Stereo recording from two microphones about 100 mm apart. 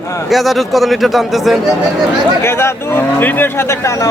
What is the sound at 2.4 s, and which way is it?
Speech, 25° left (ahead or behind).